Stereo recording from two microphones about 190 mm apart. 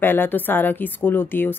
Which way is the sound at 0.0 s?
10° left (ahead or behind).